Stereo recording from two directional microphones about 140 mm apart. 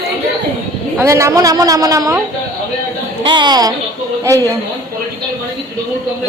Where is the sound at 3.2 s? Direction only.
35° right (ahead or behind).